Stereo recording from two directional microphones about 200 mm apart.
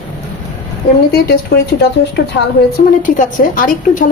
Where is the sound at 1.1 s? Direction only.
50° left (ahead or behind).